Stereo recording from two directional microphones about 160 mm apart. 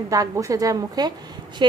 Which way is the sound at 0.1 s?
20° right (ahead or behind).